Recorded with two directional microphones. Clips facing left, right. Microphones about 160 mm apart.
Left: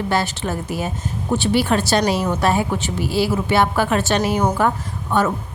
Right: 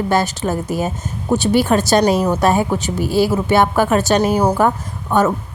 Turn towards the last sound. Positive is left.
turn(degrees=-45)  # may be behind; listen again after turning